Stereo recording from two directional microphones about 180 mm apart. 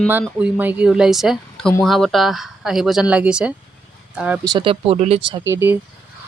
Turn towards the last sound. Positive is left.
turn(degrees=-15)  # may be behind; listen again after turning